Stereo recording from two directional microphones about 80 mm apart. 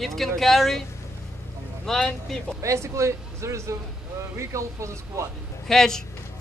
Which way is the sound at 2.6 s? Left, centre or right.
Right.